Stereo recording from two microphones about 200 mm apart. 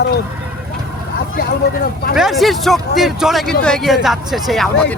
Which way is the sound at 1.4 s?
50° left (ahead or behind).